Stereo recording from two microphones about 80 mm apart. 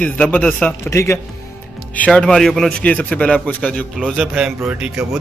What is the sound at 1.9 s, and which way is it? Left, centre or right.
Speech, centre.